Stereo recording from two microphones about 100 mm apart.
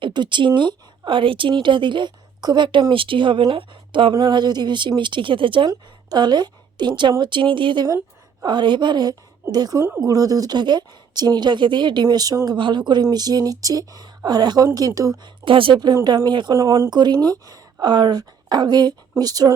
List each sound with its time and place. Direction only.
0.0 s a woman's voice: 50° right (ahead or behind)
2.9 s speech: 60° right (ahead or behind)
4.2 s speech: 45° right (ahead or behind)
12.0 s speech: 40° right (ahead or behind)
15.4 s speech: 60° right (ahead or behind)
16.6 s speech: 35° right (ahead or behind)